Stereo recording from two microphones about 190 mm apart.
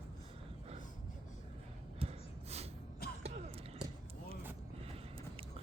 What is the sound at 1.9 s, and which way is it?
Gasp, 35° right (ahead or behind).